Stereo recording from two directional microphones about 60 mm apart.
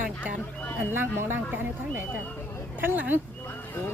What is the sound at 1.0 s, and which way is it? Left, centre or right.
Speech, right.